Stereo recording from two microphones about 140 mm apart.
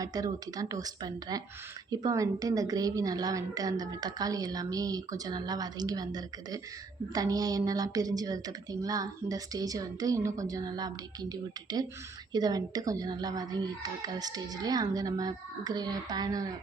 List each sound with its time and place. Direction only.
0.0 s a woman's voice: 25° right (ahead or behind)